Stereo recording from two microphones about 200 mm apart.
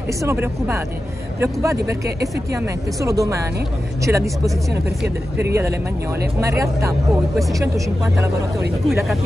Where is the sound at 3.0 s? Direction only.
15° right (ahead or behind).